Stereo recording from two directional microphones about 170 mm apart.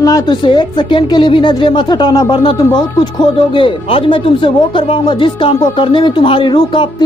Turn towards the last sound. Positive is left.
turn(degrees=25)  # may be behind; listen again after turning